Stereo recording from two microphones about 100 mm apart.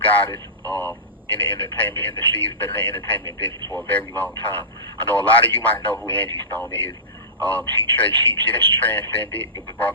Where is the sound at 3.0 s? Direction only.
30° left (ahead or behind).